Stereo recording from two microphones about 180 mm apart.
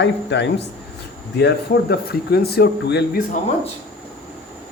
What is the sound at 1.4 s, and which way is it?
Speech, 65° left (ahead or behind).